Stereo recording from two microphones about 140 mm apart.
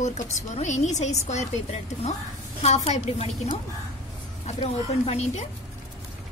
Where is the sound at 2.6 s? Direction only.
50° left (ahead or behind).